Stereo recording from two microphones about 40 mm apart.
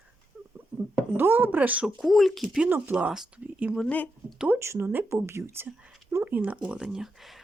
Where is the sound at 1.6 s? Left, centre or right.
Right.